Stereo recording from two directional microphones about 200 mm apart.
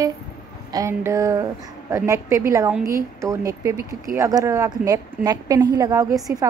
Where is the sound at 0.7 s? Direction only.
15° right (ahead or behind).